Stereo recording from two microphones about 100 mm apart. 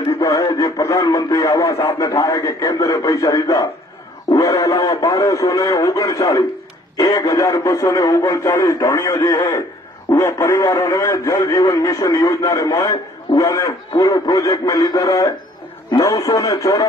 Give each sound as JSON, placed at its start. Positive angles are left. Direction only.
{"t": 0.1, "sound": "speech", "side_deg": 30}